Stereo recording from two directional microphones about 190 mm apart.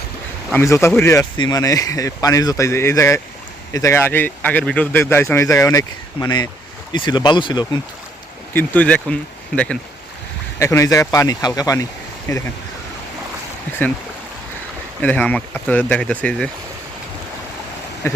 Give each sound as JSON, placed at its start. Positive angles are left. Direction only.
{"t": 0.5, "sound": "speech", "side_deg": 15}
{"t": 8.5, "sound": "speech", "side_deg": 10}
{"t": 10.6, "sound": "speech", "side_deg": 15}
{"t": 15.0, "sound": "speech", "side_deg": 10}
{"t": 18.0, "sound": "a sound", "side_deg": 15}